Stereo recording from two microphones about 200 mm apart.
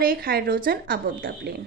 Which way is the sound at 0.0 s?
45° right (ahead or behind).